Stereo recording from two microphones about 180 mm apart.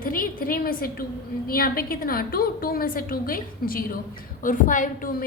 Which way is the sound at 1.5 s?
55° left (ahead or behind).